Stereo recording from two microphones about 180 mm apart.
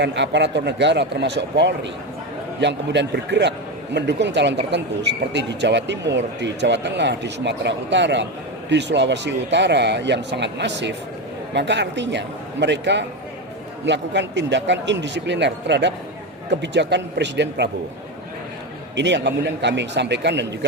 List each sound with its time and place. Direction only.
0.0 s a man's voice: 75° right (ahead or behind)
18.9 s a man's voice: 75° right (ahead or behind)